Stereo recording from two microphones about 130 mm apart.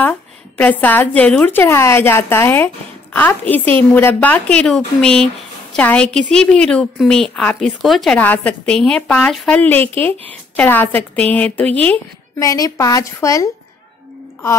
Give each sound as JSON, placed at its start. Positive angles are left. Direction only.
{"t": 0.6, "sound": "a woman's voice", "side_deg": 10}
{"t": 8.2, "sound": "a woman's voice", "side_deg": 10}
{"t": 9.6, "sound": "a woman's voice", "side_deg": 15}
{"t": 12.4, "sound": "a woman's voice", "side_deg": 25}